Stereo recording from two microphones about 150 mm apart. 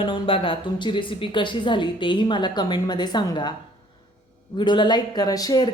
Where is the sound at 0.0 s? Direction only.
35° left (ahead or behind).